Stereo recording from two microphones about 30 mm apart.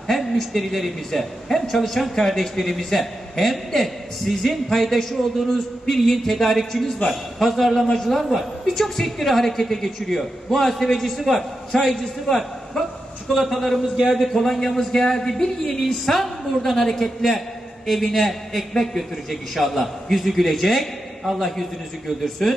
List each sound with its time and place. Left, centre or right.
0.0 s a sound: centre
0.5 s a man's voice: centre
11.9 s a man's voice: centre
13.3 s a man's voice: centre
17.8 s a man's voice: centre
19.5 s a man's voice: centre